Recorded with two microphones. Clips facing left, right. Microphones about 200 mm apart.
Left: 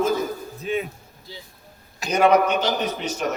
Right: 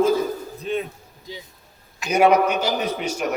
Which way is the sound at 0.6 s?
5° left (ahead or behind).